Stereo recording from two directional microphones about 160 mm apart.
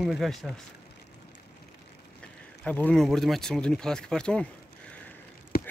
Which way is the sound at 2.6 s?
10° left (ahead or behind).